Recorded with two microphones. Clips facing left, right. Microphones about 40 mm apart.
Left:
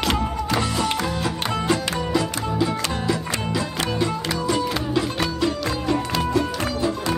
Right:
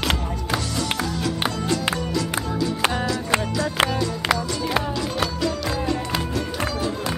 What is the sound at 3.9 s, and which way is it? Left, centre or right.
Music, left.